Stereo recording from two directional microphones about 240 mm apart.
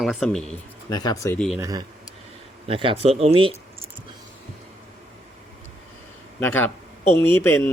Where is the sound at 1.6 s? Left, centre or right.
Centre.